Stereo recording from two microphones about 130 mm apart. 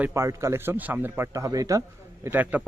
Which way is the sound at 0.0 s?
20° right (ahead or behind).